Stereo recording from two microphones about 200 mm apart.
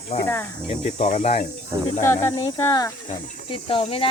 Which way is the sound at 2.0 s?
15° left (ahead or behind).